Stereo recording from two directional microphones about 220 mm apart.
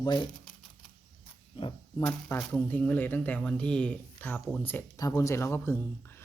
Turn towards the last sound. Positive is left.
turn(degrees=10)  # may be behind; listen again after turning